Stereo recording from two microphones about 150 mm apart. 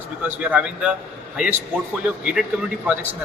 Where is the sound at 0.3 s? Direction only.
10° right (ahead or behind).